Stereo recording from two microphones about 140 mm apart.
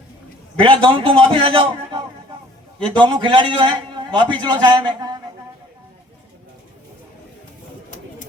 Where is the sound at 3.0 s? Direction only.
35° right (ahead or behind).